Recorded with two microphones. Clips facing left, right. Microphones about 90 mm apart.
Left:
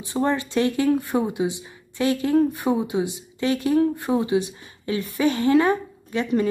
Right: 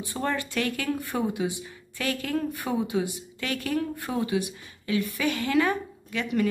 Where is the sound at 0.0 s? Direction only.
25° left (ahead or behind).